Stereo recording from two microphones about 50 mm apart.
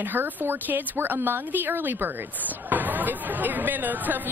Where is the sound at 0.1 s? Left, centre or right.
Right.